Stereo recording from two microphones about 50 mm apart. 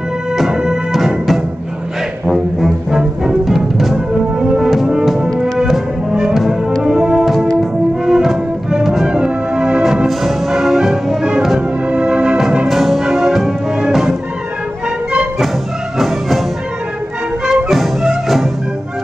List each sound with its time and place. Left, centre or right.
0.5 s music: centre
6.3 s music: centre
7.2 s music: centre
9.0 s music: centre
10.0 s music: centre; by 12.4 s right
12.6 s music: centre
16.0 s music: centre